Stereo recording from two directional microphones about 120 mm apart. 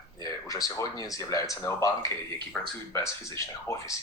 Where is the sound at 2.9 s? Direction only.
25° left (ahead or behind).